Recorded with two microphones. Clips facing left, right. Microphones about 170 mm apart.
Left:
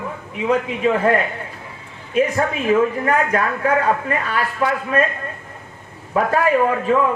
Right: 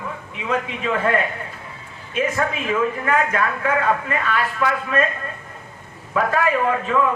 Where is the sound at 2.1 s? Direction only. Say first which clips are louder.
Left 4 dB; 35° left (ahead or behind).